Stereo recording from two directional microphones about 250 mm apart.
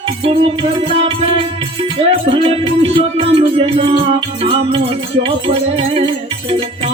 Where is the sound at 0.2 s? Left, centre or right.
Right.